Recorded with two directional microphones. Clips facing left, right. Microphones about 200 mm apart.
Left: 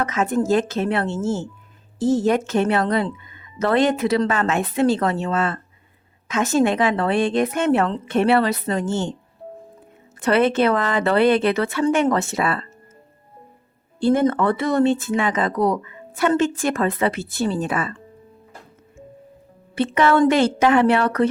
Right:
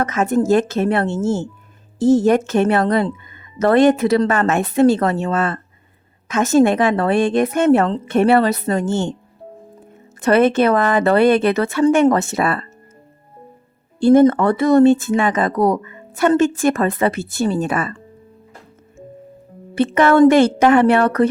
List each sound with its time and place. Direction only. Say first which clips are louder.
0.0 s speech: right 4 dB; 45° right (ahead or behind)
10.2 s speech: right 4 dB; 45° right (ahead or behind)
14.0 s speech: right 6 dB; 45° right (ahead or behind)
19.7 s speech: right 4 dB; 45° right (ahead or behind)